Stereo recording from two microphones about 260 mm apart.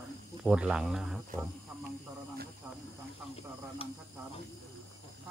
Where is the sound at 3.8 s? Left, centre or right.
Left.